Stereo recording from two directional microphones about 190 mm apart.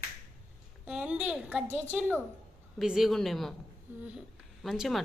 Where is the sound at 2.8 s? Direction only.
Centre (ahead or behind).